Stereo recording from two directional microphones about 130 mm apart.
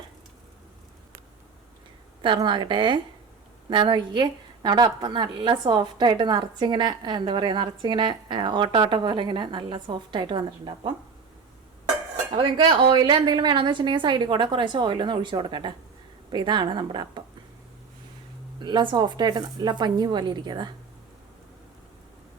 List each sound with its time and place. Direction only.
2.2 s a woman's voice: 40° right (ahead or behind)
12.3 s a woman's voice: 40° right (ahead or behind)
18.6 s a woman's voice: 35° right (ahead or behind)